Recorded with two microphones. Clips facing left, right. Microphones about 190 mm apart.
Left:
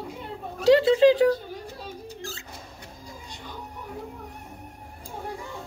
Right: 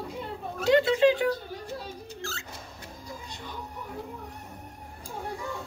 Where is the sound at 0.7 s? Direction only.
30° left (ahead or behind).